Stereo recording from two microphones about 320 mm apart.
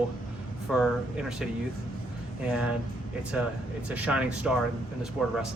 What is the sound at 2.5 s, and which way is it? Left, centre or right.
Speech, centre.